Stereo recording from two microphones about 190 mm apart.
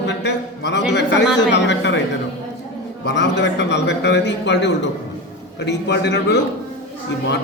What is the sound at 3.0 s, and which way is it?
A man's voice, 65° left (ahead or behind).